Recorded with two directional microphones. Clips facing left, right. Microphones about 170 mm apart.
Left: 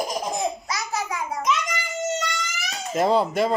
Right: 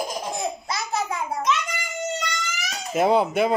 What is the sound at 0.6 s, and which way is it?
Babbling, 25° right (ahead or behind).